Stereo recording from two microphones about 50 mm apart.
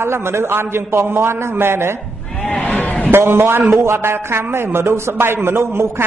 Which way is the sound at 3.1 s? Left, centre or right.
Right.